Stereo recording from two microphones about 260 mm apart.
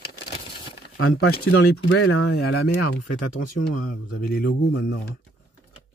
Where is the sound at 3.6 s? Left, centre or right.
Left.